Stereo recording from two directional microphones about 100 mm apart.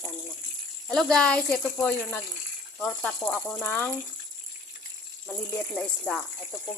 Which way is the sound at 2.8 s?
10° left (ahead or behind).